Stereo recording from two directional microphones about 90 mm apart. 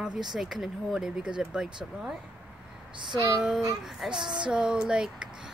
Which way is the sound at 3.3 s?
10° right (ahead or behind).